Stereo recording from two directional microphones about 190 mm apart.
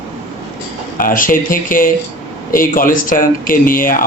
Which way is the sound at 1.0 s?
45° left (ahead or behind).